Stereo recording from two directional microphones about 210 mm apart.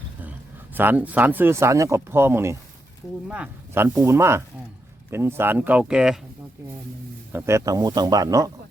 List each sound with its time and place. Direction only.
0.7 s speech: 10° right (ahead or behind)
7.3 s speech: 15° right (ahead or behind)